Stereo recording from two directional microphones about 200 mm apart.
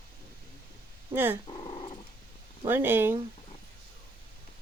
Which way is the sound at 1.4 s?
25° left (ahead or behind).